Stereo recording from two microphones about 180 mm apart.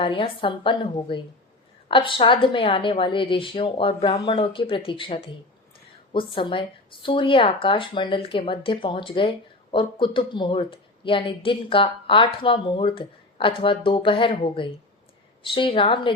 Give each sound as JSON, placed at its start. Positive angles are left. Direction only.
{"t": 0.0, "sound": "speech", "side_deg": 30}